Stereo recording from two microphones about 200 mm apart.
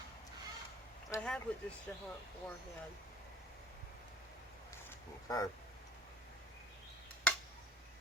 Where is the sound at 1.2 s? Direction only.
5° left (ahead or behind).